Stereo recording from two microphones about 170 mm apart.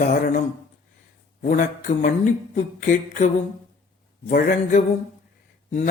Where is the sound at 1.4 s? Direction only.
50° left (ahead or behind).